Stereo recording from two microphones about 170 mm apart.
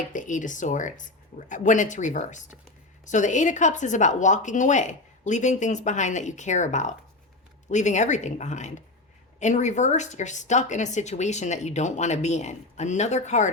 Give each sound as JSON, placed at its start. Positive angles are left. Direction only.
{"t": 0.1, "sound": "speech", "side_deg": 50}